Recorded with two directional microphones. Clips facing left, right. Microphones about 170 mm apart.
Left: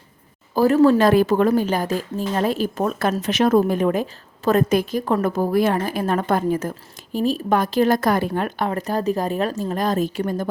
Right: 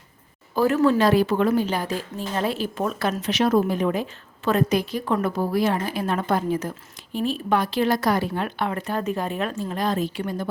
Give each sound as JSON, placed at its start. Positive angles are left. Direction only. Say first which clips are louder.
{"t": 0.5, "sound": "a woman's voice", "louder": "left 4 dB", "side_deg": 35}